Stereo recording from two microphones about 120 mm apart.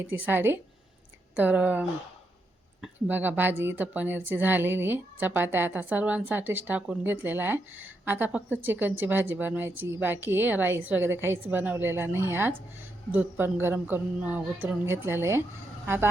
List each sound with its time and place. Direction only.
0.0 s a woman's voice: 15° right (ahead or behind)
3.1 s a woman's voice: 15° right (ahead or behind)